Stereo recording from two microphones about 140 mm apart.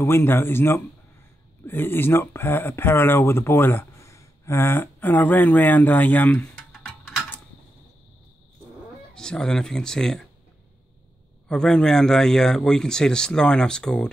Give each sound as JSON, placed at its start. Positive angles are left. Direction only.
{"t": 0.0, "sound": "speech", "side_deg": 15}
{"t": 9.1, "sound": "speech", "side_deg": 5}
{"t": 11.4, "sound": "speech", "side_deg": 5}